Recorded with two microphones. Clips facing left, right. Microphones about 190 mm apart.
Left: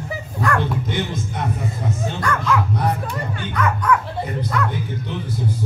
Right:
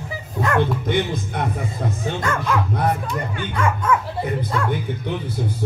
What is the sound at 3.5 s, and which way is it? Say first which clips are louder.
Speech: left 1 dB; 25° right (ahead or behind).